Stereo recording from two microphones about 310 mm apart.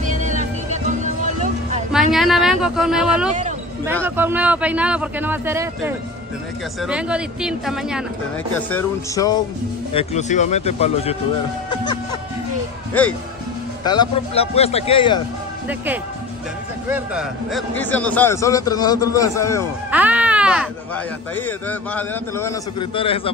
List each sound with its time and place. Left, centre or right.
0.0 s music: right
1.9 s a man's voice: centre
9.9 s a man's voice: left
13.8 s a man's voice: centre
16.9 s a man's voice: centre
19.9 s speech: centre